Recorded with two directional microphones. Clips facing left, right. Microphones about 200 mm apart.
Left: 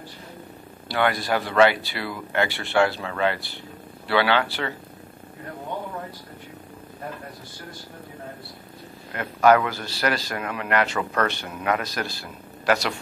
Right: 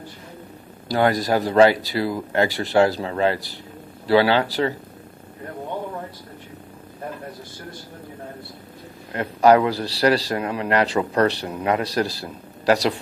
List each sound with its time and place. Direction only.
0.8 s speech: 40° right (ahead or behind)
9.1 s speech: 30° right (ahead or behind)